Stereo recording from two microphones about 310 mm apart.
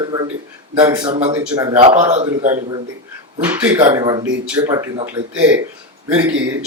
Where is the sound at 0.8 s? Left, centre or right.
Centre.